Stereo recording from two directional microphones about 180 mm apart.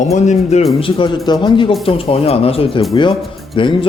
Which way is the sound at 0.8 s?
25° left (ahead or behind).